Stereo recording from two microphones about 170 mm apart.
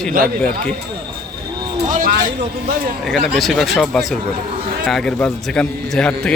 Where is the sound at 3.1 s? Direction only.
Centre (ahead or behind).